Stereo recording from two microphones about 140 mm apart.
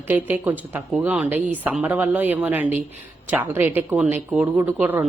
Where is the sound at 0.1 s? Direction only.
10° right (ahead or behind).